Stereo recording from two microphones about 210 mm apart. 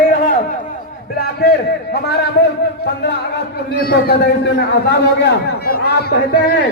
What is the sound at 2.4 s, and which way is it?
Speech, 50° left (ahead or behind).